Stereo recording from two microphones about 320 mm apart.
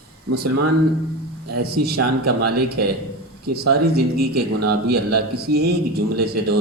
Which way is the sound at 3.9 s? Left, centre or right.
Right.